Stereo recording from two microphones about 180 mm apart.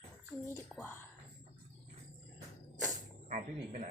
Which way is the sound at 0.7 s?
10° left (ahead or behind).